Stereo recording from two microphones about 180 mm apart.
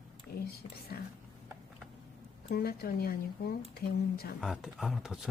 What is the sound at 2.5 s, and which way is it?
Speech, 60° left (ahead or behind).